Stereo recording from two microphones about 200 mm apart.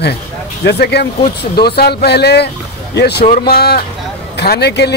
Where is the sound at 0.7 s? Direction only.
55° left (ahead or behind).